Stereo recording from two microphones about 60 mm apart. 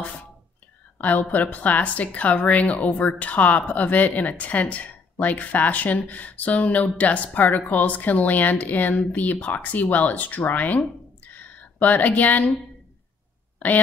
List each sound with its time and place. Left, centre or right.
0.9 s a woman's voice: left